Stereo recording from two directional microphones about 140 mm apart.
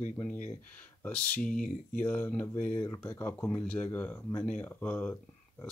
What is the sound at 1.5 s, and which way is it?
Speech, 75° left (ahead or behind).